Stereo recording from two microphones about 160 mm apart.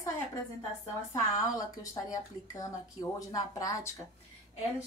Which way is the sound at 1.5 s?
20° left (ahead or behind).